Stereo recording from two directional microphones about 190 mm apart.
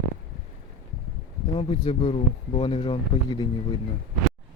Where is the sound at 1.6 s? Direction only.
30° left (ahead or behind).